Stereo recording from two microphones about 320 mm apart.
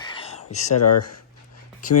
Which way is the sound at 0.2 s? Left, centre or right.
Centre.